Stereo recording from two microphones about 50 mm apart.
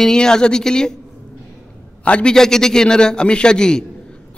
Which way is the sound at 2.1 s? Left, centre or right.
Left.